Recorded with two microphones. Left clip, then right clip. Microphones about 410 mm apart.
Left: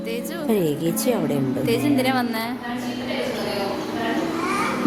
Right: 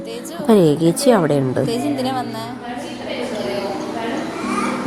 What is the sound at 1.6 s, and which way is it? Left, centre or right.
Speech, left.